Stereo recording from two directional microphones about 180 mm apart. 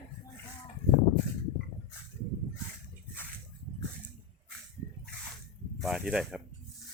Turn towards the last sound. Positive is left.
turn(degrees=-5)  # may be behind; listen again after turning